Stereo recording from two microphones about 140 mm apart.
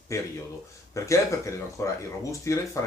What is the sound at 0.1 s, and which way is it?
Speech, 20° left (ahead or behind).